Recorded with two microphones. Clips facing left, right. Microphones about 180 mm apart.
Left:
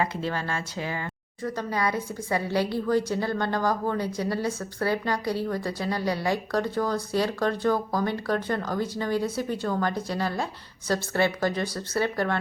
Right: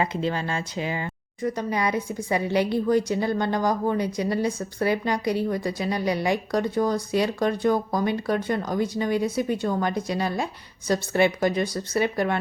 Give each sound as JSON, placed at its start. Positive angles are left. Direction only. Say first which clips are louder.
{"t": 0.0, "sound": "speech", "louder": "right 3 dB", "side_deg": -20}